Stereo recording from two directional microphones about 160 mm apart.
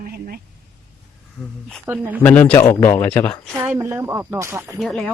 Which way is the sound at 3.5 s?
15° right (ahead or behind).